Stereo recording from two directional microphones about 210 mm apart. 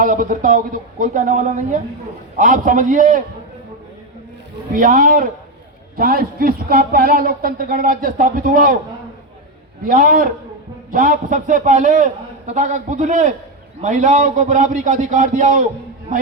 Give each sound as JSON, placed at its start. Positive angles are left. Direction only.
{"t": 0.0, "sound": "a man's voice", "side_deg": -40}
{"t": 4.7, "sound": "a man's voice", "side_deg": -40}
{"t": 9.8, "sound": "a man's voice", "side_deg": -40}